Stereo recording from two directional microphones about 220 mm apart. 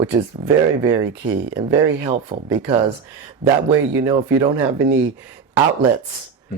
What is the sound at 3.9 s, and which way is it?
Speech, 15° right (ahead or behind).